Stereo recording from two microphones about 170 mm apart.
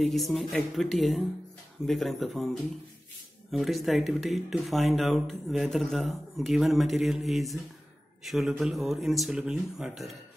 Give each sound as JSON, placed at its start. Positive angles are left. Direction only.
{"t": 0.0, "sound": "speech", "side_deg": 0}
{"t": 3.5, "sound": "speech", "side_deg": 0}